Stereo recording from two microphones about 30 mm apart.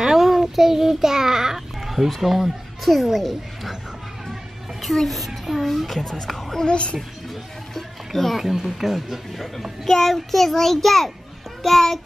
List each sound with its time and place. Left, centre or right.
0.0 s a sound: centre
1.9 s speech: centre
5.0 s a child's voice: centre
6.6 s a child's voice: left
7.7 s a sound: centre
8.4 s speech: centre
9.8 s a child's voice: centre